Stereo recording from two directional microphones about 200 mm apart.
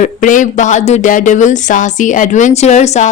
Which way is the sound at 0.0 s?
40° left (ahead or behind).